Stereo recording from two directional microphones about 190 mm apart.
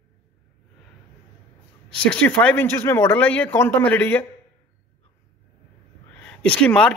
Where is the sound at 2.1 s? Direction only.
5° left (ahead or behind).